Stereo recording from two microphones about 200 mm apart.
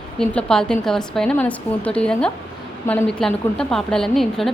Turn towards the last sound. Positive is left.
turn(degrees=0)  # may be behind; listen again after turning